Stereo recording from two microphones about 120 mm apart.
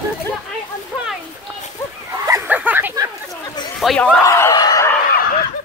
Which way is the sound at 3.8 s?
Centre (ahead or behind).